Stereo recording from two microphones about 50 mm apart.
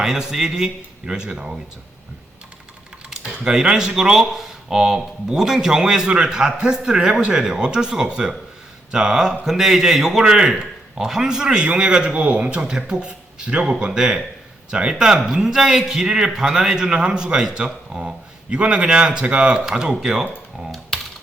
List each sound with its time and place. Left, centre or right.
0.0 s speech: centre
3.1 s speech: centre
20.7 s typing: centre